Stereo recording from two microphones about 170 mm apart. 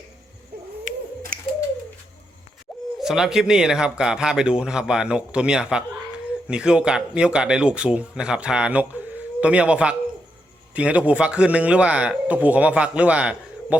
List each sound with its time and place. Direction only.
0.5 s cat: 65° right (ahead or behind)
1.3 s bird: 55° right (ahead or behind)
3.0 s a man's voice: 5° right (ahead or behind)